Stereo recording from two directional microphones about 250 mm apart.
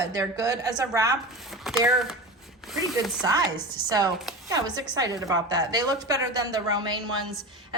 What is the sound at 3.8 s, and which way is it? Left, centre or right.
A woman's voice, centre.